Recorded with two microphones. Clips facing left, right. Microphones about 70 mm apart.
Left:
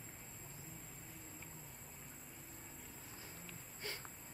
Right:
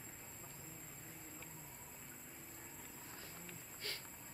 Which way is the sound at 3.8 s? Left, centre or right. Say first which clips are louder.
Left 2 dB; left.